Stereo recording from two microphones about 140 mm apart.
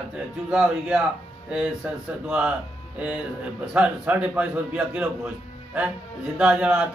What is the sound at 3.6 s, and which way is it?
A man's voice, 10° right (ahead or behind).